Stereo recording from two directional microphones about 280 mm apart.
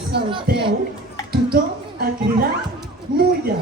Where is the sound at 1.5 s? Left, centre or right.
Right.